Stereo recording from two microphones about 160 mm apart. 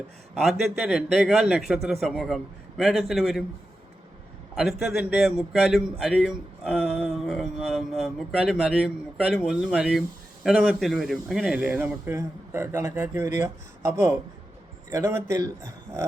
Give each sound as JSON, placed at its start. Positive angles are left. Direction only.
{"t": 0.3, "sound": "a man's voice", "side_deg": 0}
{"t": 4.5, "sound": "a man's voice", "side_deg": -5}